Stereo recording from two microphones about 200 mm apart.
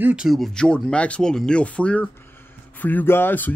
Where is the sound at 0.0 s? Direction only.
5° right (ahead or behind).